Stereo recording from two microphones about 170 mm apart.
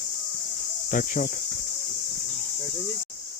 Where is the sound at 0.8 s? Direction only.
50° left (ahead or behind).